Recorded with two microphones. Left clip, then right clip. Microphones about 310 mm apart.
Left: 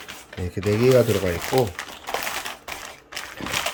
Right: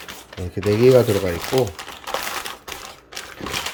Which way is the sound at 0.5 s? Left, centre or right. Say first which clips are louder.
Right 4 dB; centre.